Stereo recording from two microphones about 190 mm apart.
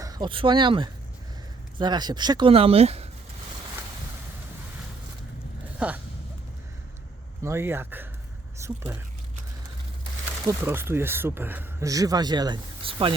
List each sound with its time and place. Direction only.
0.0 s speech: 20° right (ahead or behind)
5.8 s speech: 10° right (ahead or behind)
7.4 s speech: 15° right (ahead or behind)
10.4 s speech: 10° right (ahead or behind); by 13.1 s 30° right (ahead or behind)